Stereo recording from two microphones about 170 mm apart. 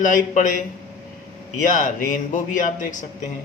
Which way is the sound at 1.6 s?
50° left (ahead or behind).